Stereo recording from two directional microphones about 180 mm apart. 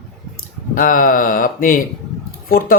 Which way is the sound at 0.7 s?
50° left (ahead or behind).